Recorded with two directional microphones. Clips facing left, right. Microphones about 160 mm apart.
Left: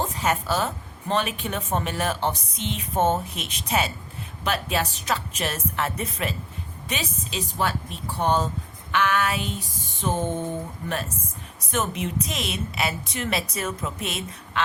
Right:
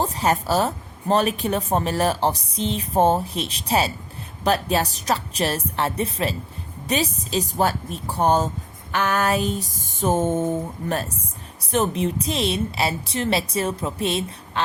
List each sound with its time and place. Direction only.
0.0 s a woman's voice: 35° right (ahead or behind)
11.7 s a woman's voice: 30° right (ahead or behind)